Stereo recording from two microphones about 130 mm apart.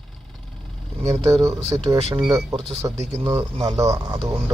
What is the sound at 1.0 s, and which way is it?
Speech, 25° right (ahead or behind).